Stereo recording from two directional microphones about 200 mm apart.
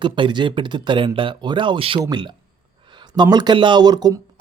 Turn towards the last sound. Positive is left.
turn(degrees=-20)  # may be behind; listen again after turning